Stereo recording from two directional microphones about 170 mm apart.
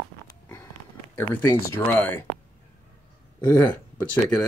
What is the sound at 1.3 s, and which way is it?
Speech, 10° left (ahead or behind).